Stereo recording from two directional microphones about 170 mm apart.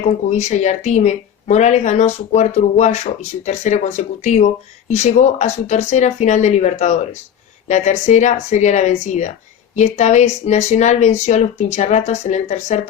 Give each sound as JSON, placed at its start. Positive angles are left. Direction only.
{"t": 0.0, "sound": "speech", "side_deg": 45}